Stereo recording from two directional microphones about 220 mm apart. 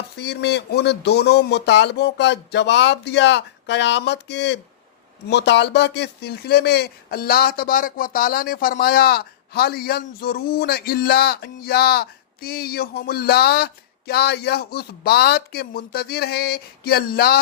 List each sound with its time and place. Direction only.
0.2 s speech: 50° left (ahead or behind)